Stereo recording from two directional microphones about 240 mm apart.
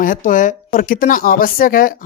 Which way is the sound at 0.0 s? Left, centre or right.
Left.